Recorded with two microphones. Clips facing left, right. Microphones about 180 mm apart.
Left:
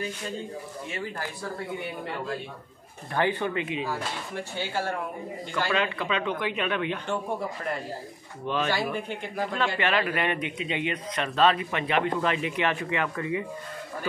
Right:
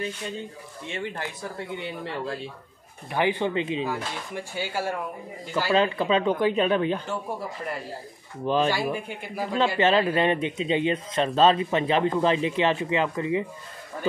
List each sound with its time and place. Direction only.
0.8 s speech: 25° right (ahead or behind)
3.1 s speech: 15° right (ahead or behind)
4.4 s speech: 10° right (ahead or behind)
5.7 s speech: 30° right (ahead or behind)
8.7 s speech: 10° right (ahead or behind)
9.8 s speech: 25° right (ahead or behind)